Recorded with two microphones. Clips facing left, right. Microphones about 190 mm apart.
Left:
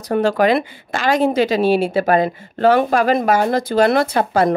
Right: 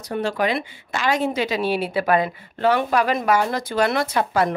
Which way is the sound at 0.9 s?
40° left (ahead or behind).